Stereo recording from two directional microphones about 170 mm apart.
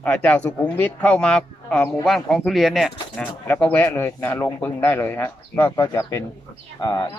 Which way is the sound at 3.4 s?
10° left (ahead or behind).